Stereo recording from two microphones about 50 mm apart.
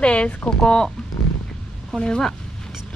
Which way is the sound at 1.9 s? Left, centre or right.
Centre.